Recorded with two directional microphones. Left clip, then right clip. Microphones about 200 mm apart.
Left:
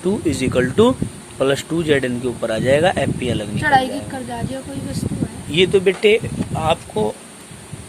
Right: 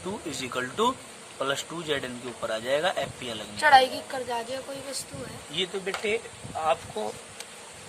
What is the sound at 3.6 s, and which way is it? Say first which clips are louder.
Speech: left 2 dB; 40° right (ahead or behind).